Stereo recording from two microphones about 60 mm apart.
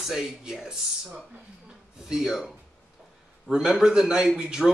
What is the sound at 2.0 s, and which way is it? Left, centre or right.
A man's voice, centre.